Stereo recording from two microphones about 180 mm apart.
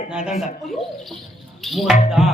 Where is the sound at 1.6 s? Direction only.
Centre (ahead or behind).